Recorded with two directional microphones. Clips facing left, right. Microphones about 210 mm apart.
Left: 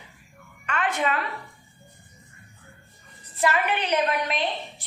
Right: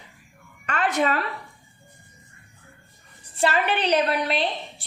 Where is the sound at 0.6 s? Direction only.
40° right (ahead or behind).